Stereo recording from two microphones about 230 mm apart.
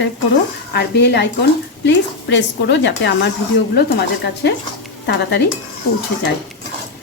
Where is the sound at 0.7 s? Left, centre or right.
Left.